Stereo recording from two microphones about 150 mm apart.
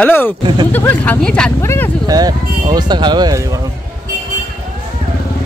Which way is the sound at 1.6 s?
15° left (ahead or behind).